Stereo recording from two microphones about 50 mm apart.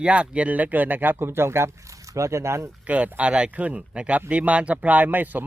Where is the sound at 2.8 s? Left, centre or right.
Right.